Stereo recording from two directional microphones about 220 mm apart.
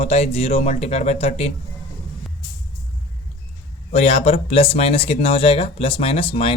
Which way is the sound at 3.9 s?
30° left (ahead or behind).